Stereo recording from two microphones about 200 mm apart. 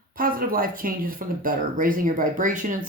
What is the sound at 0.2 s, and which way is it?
Speech, 45° right (ahead or behind).